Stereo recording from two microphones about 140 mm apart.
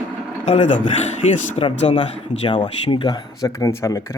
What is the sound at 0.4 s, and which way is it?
Speech, 50° left (ahead or behind).